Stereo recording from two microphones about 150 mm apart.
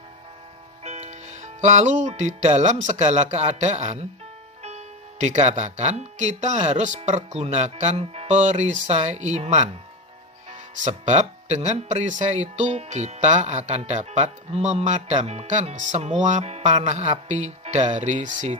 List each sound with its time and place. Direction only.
0.9 s speech: 50° right (ahead or behind)